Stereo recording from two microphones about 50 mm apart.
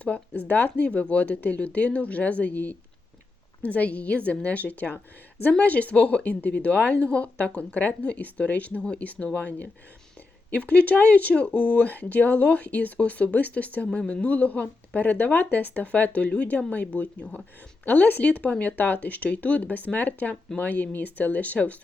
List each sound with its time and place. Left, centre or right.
0.0 s speech: left